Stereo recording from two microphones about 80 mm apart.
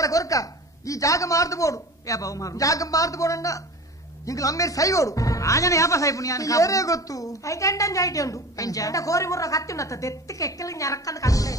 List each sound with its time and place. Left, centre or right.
0.0 s a woman's voice: left